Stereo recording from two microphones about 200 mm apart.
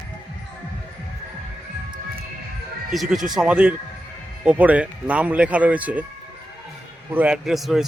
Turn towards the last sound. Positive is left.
turn(degrees=0)  # may be behind; listen again after turning